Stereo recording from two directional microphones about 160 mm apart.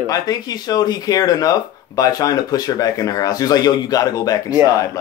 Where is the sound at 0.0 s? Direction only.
25° left (ahead or behind).